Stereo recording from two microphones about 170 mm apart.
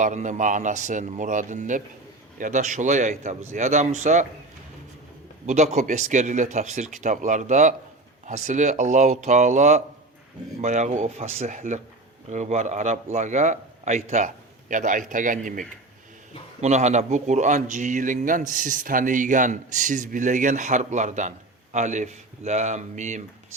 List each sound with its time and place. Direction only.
0.0 s speech: 45° right (ahead or behind)
5.5 s speech: 40° right (ahead or behind)